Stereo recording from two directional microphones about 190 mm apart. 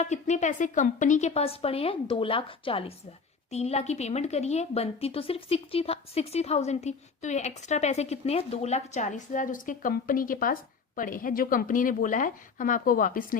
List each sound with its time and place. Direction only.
0.0 s a woman's voice: 40° left (ahead or behind)